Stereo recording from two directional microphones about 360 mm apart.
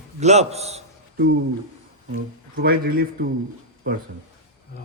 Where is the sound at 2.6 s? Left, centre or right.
Right.